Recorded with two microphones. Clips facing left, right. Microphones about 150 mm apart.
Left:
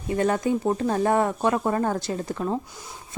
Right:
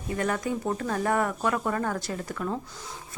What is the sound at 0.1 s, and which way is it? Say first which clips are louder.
Speech: left 6 dB; 25° left (ahead or behind).